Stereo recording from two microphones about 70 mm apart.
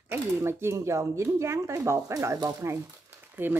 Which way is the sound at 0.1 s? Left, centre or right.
Right.